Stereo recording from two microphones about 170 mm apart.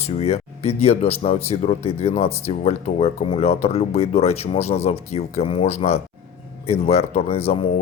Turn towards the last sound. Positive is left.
turn(degrees=35)  # may be behind; listen again after turning